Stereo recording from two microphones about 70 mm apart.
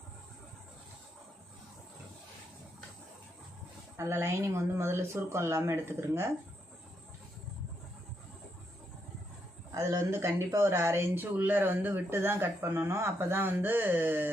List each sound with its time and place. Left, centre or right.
3.9 s speech: right
9.7 s speech: right
11.1 s speech: right